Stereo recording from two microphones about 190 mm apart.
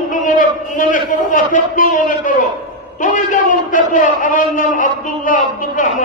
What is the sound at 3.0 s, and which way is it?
A man's voice, 40° left (ahead or behind).